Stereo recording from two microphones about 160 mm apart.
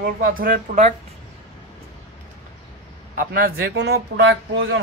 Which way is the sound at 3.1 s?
65° right (ahead or behind).